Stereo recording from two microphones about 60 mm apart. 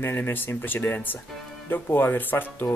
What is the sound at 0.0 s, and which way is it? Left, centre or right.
Speech, left.